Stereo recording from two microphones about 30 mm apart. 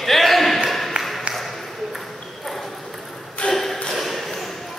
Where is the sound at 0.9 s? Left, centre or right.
Right.